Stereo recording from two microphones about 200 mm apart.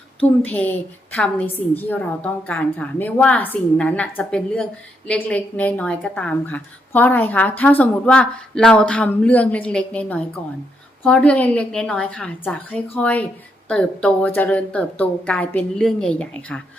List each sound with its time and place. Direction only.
0.4 s a woman's voice: 10° left (ahead or behind)